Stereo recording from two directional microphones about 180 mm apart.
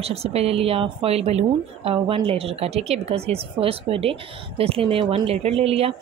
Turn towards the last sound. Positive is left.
turn(degrees=-35)  # may be behind; listen again after turning